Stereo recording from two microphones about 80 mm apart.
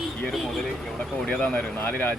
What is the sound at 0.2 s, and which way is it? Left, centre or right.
Speech, centre.